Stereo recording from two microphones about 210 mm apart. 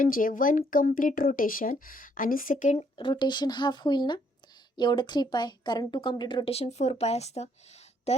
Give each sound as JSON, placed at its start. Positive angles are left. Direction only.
{"t": 0.0, "sound": "speech", "side_deg": 40}
{"t": 2.7, "sound": "speech", "side_deg": 25}